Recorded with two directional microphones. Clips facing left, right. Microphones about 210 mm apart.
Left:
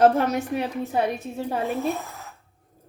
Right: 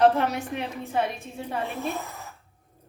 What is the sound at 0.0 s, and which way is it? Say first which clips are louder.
A woman's voice: left 2 dB; 40° left (ahead or behind).